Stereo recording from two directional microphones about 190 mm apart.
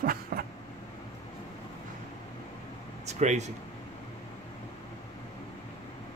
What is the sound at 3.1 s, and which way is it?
Speech, 35° right (ahead or behind).